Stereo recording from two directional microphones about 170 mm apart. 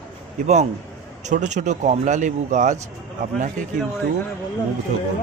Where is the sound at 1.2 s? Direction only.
45° right (ahead or behind).